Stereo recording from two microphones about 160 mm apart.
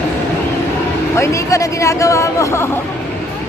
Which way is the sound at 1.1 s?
20° left (ahead or behind).